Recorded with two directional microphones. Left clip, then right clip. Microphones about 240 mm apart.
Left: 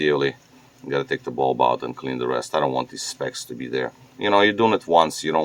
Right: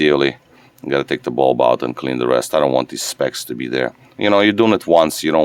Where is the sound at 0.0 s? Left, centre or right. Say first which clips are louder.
Right 6 dB; right.